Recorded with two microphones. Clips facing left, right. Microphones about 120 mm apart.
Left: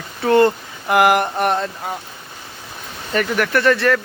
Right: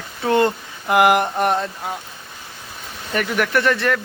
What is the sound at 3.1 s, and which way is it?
Speech, 10° right (ahead or behind).